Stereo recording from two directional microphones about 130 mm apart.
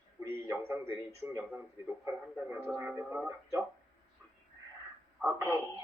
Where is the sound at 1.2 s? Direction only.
20° right (ahead or behind).